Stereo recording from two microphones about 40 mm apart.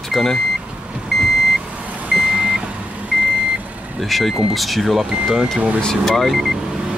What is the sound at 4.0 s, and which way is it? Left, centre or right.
Speech, centre.